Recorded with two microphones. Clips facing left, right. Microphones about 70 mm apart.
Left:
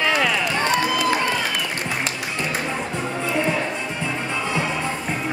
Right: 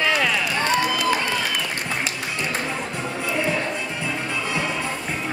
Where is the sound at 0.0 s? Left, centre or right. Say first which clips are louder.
Left 1 dB; centre.